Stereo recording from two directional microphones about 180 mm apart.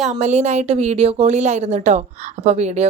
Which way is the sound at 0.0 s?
40° right (ahead or behind).